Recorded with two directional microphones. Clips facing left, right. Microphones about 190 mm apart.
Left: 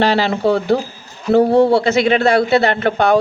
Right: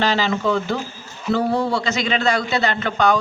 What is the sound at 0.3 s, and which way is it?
Speech, 35° left (ahead or behind).